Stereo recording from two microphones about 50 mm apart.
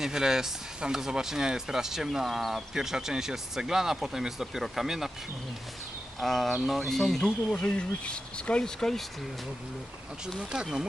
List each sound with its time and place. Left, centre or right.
0.0 s speech: centre
6.1 s speech: centre
7.6 s speech: left
8.8 s speech: centre
10.5 s speech: centre